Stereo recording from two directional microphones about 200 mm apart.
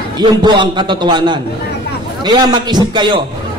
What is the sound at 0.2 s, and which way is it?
A man's voice, 20° right (ahead or behind).